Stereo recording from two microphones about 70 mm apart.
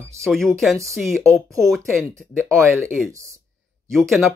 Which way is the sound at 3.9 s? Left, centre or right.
Centre.